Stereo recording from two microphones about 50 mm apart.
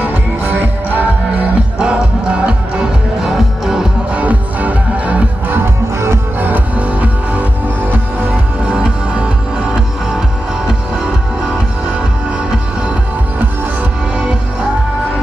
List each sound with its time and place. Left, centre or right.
0.0 s music: right
2.4 s music: right
3.2 s music: centre
4.1 s music: right
6.4 s music: right